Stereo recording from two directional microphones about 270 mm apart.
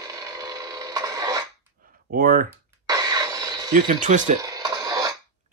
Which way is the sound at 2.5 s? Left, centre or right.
Centre.